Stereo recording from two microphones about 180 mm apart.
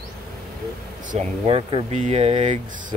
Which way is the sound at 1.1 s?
35° right (ahead or behind).